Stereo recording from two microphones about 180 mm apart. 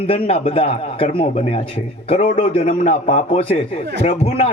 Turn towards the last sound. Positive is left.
turn(degrees=35)  # may be behind; listen again after turning